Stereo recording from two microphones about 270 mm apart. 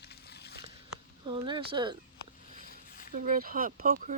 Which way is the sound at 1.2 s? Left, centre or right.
Centre.